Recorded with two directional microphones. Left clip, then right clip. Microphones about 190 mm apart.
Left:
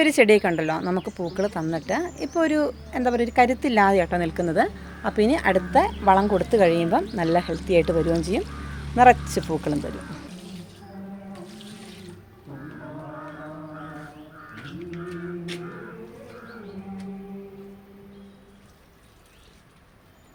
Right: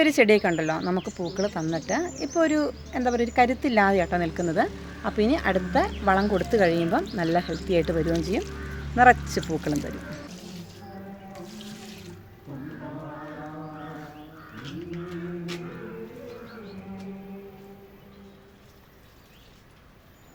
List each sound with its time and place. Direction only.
0.0 s speech: 10° left (ahead or behind)